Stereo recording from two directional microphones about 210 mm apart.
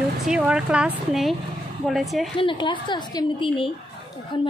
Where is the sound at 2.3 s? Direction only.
25° left (ahead or behind).